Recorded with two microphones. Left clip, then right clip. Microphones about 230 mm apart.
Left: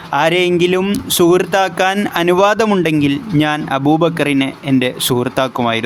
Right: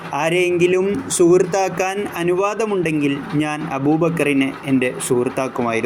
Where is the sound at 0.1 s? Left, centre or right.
Left.